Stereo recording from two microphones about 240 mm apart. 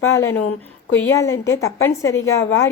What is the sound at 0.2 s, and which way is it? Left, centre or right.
A woman's voice, centre.